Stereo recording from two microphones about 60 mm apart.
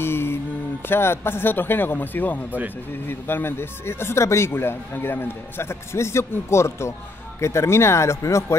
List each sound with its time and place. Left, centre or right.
0.0 s mantra: left
0.8 s a man's voice: left
4.5 s a man's voice: left